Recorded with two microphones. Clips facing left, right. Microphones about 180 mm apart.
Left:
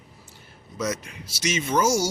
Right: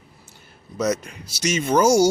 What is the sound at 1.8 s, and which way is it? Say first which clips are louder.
Speech: right 8 dB; 60° right (ahead or behind).